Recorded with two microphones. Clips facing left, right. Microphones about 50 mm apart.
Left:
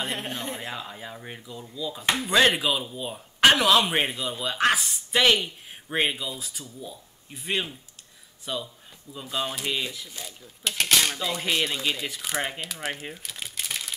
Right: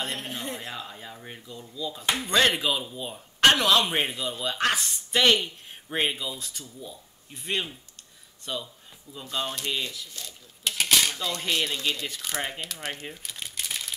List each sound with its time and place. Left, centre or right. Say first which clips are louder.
0.0 s speech: left 2 dB; centre
0.3 s speech: left 2 dB; centre
10.6 s speech: left 1 dB; centre